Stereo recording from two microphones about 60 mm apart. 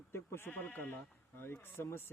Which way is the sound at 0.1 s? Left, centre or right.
Left.